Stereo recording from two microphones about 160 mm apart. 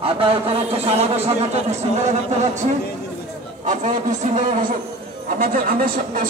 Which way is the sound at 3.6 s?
50° right (ahead or behind).